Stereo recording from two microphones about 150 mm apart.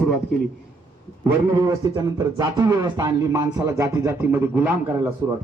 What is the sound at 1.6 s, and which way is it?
Speech, 25° right (ahead or behind).